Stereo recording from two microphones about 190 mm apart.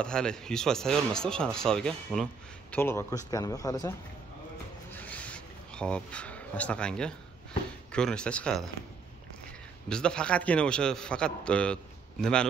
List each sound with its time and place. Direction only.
0.0 s a man's voice: 5° left (ahead or behind)
4.9 s a sound: 10° left (ahead or behind)
7.9 s a man's voice: 5° left (ahead or behind)
9.8 s a man's voice: 5° left (ahead or behind)